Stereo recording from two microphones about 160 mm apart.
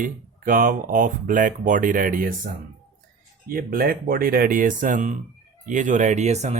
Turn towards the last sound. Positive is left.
turn(degrees=-45)  # may be behind; listen again after turning